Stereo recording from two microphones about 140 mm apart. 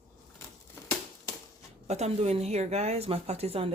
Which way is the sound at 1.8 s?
50° right (ahead or behind).